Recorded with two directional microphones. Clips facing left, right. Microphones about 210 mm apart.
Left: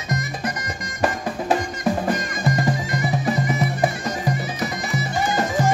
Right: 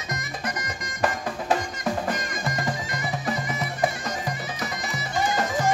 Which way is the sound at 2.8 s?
10° left (ahead or behind).